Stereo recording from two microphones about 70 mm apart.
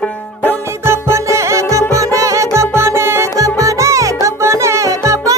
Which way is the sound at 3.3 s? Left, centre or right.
Right.